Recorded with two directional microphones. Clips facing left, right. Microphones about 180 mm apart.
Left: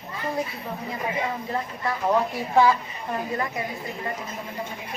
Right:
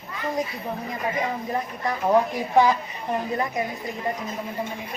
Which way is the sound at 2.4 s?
15° right (ahead or behind).